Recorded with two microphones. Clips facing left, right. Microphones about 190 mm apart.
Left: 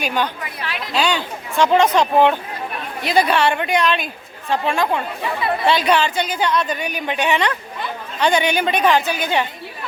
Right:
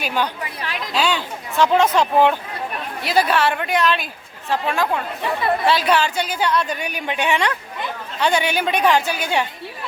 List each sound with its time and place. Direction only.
0.0 s a woman's voice: 5° right (ahead or behind)